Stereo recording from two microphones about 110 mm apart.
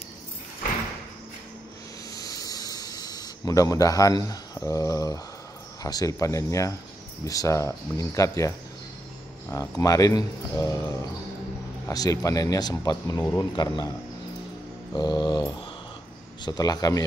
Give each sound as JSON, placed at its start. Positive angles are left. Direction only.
{"t": 2.1, "sound": "snake", "side_deg": 35}
{"t": 4.6, "sound": "speech", "side_deg": 30}
{"t": 15.0, "sound": "speech", "side_deg": 40}
{"t": 16.4, "sound": "speech", "side_deg": 35}